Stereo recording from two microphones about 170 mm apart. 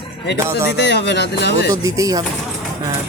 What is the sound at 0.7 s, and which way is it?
Speech, 80° left.